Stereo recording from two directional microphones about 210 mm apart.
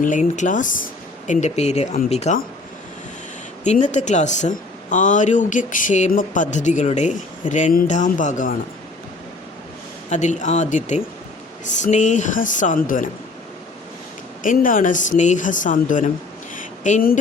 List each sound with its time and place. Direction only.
0.0 s speech: 35° left (ahead or behind)
3.6 s speech: 35° left (ahead or behind)
10.1 s speech: 35° left (ahead or behind)
14.4 s speech: 40° left (ahead or behind)
16.6 s a sound: 35° left (ahead or behind)